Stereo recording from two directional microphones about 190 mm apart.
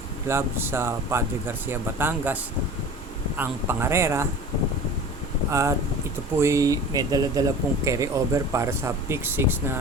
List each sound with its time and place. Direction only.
0.3 s speech: 15° right (ahead or behind)
5.5 s speech: 15° right (ahead or behind)